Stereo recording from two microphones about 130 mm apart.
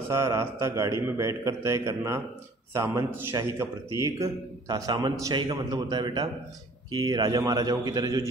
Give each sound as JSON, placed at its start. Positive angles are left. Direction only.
{"t": 0.1, "sound": "a man's voice", "side_deg": -20}